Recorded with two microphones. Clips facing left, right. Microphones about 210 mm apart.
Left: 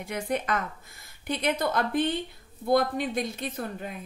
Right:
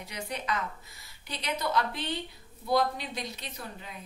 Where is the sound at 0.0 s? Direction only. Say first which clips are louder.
Left 8 dB; 50° left (ahead or behind).